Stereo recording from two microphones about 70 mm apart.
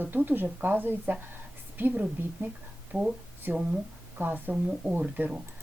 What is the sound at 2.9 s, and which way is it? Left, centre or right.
Speech, centre.